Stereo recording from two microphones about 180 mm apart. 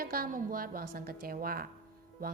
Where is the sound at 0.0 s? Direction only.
55° right (ahead or behind).